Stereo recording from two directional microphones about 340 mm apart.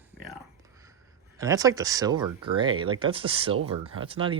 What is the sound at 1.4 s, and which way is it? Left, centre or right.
Speech, centre.